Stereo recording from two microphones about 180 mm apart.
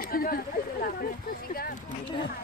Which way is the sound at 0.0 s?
55° left (ahead or behind).